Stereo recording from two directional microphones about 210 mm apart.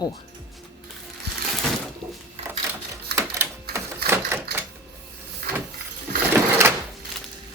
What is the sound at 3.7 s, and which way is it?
Typewriter, 50° right (ahead or behind).